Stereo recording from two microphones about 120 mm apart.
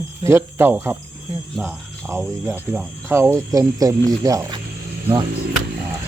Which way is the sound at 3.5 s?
30° right (ahead or behind).